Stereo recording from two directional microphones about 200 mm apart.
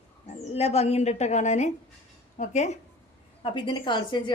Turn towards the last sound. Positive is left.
turn(degrees=25)  # may be behind; listen again after turning